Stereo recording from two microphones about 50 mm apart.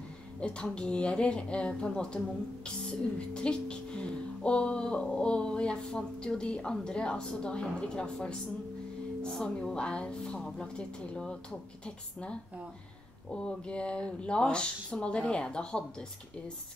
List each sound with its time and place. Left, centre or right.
0.4 s a woman's voice: left